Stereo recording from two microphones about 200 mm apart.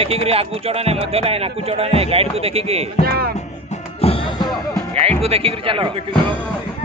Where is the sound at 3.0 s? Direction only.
50° right (ahead or behind).